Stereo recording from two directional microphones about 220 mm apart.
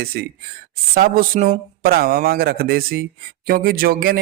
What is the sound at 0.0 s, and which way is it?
Speech, 45° right (ahead or behind).